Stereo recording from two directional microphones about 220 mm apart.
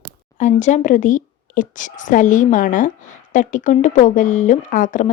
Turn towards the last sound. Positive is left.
turn(degrees=35)  # may be behind; listen again after turning